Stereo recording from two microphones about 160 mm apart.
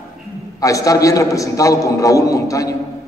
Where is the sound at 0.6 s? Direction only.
20° left (ahead or behind).